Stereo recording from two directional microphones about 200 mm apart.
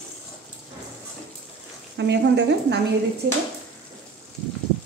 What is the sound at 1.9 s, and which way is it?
Speech, 60° right (ahead or behind).